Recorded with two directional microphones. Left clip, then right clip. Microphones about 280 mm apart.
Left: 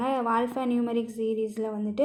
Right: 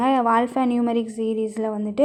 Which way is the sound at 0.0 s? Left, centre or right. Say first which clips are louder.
Right 7 dB; right.